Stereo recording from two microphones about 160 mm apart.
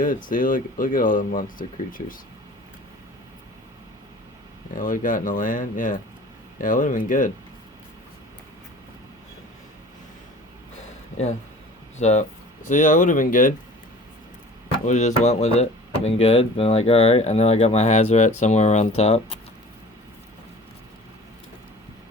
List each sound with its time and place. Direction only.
0.0 s speech: 60° left (ahead or behind)
4.7 s speech: 60° left (ahead or behind)
11.9 s speech: 45° left (ahead or behind)
14.8 s speech: 50° left (ahead or behind)